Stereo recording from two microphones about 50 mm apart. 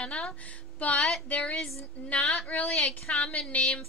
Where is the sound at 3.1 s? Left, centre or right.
Left.